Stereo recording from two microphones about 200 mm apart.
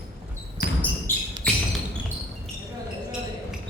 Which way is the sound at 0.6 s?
45° left (ahead or behind).